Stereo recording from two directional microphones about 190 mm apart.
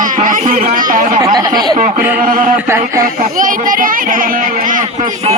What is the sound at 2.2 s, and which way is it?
Speech, 45° right (ahead or behind).